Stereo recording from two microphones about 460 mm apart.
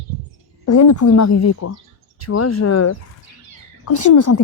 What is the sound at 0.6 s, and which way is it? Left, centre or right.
Speech, left.